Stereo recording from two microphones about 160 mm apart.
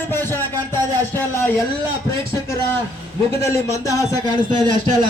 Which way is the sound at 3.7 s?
20° left (ahead or behind).